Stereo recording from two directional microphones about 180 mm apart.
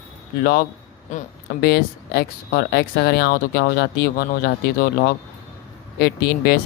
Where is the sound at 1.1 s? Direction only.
45° left (ahead or behind).